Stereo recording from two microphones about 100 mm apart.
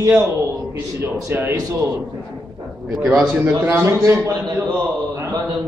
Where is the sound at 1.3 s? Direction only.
20° right (ahead or behind).